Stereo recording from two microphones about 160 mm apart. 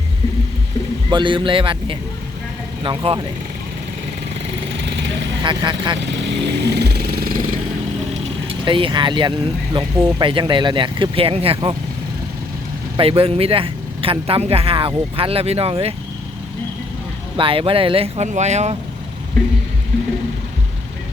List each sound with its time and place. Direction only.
1.1 s speech: 30° right (ahead or behind)
4.8 s vehicle: 90° right
5.4 s speech: 30° right (ahead or behind)
6.0 s vehicle: 90° right
8.4 s speech: 30° right (ahead or behind)
13.0 s speech: 35° right (ahead or behind)
17.3 s speech: 35° right (ahead or behind)